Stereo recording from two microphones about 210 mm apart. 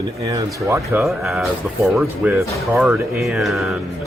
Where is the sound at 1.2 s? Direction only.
Centre (ahead or behind).